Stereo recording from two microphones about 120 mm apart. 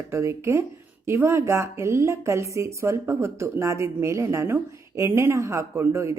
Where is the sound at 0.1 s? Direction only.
25° right (ahead or behind).